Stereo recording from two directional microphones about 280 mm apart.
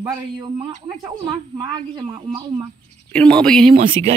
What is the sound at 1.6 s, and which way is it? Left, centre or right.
A man's voice, centre.